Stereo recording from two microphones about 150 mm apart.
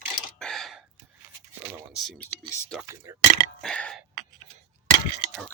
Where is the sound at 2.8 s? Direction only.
20° right (ahead or behind).